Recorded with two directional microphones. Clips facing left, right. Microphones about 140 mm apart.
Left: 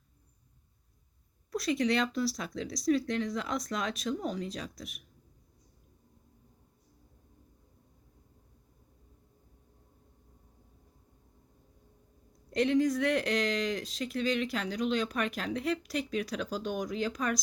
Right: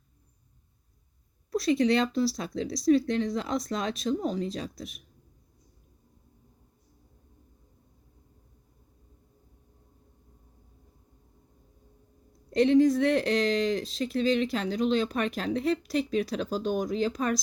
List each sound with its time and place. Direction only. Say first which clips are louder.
1.5 s speech: right 5 dB; 30° right (ahead or behind)
12.5 s speech: right 6 dB; 30° right (ahead or behind)